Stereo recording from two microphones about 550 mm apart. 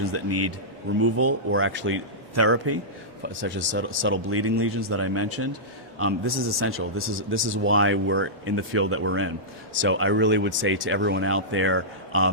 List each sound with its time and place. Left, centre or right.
0.0 s speech: right